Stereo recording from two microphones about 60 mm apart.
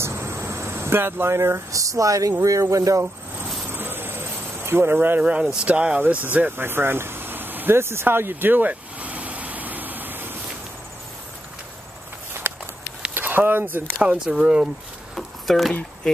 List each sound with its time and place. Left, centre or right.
0.0 s cricket: right
2.4 s speech: right
3.6 s cricket: right
4.9 s speech: right
5.2 s speech: centre
6.5 s vehicle: right
12.4 s walk: right
13.1 s speech: right
13.9 s speech: centre
15.1 s a sound: centre